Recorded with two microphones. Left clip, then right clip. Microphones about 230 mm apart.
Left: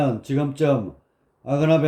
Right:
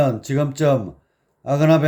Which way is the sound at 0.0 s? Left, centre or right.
Right.